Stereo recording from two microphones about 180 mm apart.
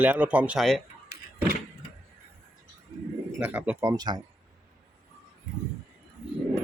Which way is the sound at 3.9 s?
25° right (ahead or behind).